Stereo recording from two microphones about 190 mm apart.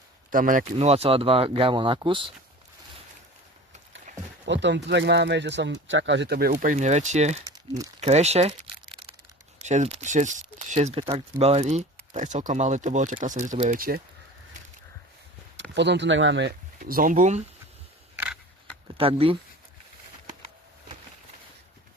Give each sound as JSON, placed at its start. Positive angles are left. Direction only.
{"t": 0.3, "sound": "speech", "side_deg": -45}
{"t": 0.8, "sound": "speech", "side_deg": -35}
{"t": 4.4, "sound": "speech", "side_deg": -65}
{"t": 7.5, "sound": "crumpling", "side_deg": -20}
{"t": 8.0, "sound": "a sound", "side_deg": -35}
{"t": 9.6, "sound": "speech", "side_deg": -35}
{"t": 15.7, "sound": "speech", "side_deg": -65}
{"t": 18.9, "sound": "speech", "side_deg": -30}